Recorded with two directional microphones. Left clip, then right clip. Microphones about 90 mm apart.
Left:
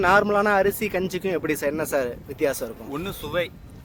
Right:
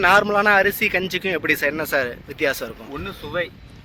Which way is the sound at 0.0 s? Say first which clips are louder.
Right 3 dB; 25° left (ahead or behind).